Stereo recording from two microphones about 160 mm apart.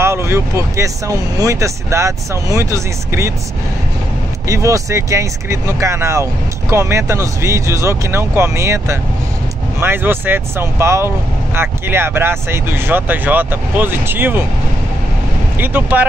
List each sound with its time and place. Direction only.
0.0 s speech: 15° right (ahead or behind)
4.5 s speech: 20° right (ahead or behind)
15.6 s speech: 10° right (ahead or behind)